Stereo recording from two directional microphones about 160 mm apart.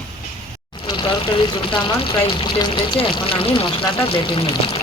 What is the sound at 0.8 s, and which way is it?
Speech, 30° left (ahead or behind).